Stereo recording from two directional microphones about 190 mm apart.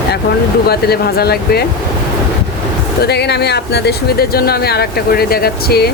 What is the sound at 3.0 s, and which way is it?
Speech, 60° left (ahead or behind).